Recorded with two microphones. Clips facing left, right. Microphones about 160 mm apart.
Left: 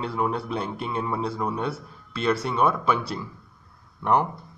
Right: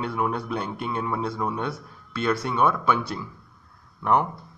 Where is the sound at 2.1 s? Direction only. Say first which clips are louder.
Left 1 dB; 30° left (ahead or behind).